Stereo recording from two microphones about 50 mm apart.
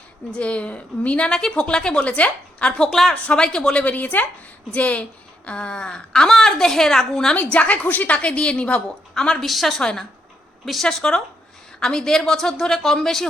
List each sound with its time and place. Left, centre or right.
0.3 s a woman's voice: left
2.9 s a woman's voice: centre
3.2 s a woman's voice: centre
3.8 s a woman's voice: left; by 7.3 s centre
7.3 s a woman's voice: left
9.1 s a woman's voice: centre